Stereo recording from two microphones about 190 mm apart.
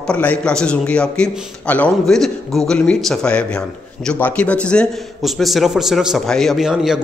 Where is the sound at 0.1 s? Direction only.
5° left (ahead or behind).